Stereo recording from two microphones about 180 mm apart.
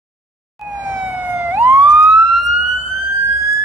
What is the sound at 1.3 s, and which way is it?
Police car, 10° right (ahead or behind).